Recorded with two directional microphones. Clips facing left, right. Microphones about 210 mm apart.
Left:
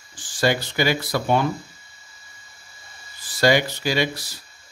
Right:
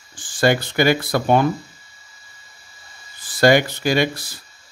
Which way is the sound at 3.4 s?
55° right (ahead or behind).